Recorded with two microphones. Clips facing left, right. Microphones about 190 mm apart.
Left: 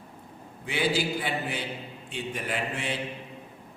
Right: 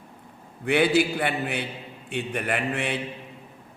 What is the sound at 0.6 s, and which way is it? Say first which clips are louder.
Mantra: right 7 dB; 60° right (ahead or behind).